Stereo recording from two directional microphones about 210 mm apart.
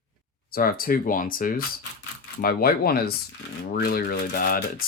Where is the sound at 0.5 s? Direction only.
45° left (ahead or behind).